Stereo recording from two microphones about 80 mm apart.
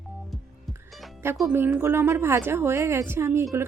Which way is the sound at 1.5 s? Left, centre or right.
Right.